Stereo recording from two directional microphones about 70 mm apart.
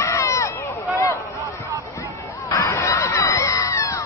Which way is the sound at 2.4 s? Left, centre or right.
Left.